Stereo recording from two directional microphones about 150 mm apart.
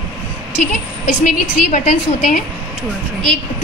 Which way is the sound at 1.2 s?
60° left (ahead or behind).